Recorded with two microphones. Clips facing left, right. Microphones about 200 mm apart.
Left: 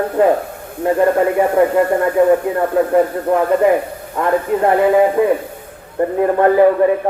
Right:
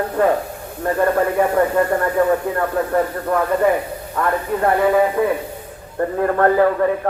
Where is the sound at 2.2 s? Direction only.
10° left (ahead or behind).